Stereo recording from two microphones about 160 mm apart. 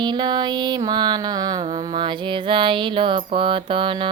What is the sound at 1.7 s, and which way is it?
Mantra, 25° right (ahead or behind).